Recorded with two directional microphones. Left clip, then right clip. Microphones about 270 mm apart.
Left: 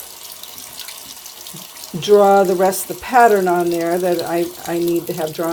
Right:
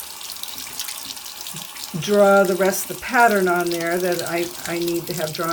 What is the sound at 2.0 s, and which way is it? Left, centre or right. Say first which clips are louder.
Speech: left 4 dB; centre.